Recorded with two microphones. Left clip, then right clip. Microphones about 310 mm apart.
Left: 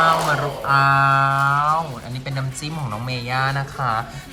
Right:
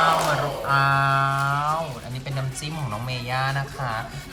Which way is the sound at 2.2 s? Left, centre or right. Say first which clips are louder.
Left 3 dB; centre.